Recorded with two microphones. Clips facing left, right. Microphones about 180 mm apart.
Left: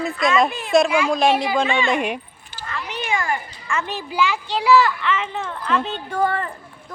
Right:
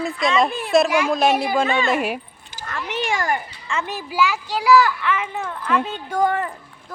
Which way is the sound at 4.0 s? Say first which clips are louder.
Right 1 dB; 5° right (ahead or behind).